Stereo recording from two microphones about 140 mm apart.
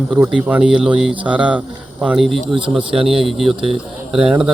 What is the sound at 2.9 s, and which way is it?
Speech, 40° right (ahead or behind).